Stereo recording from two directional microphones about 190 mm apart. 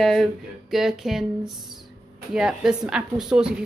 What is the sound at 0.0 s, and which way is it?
A woman's voice, centre (ahead or behind).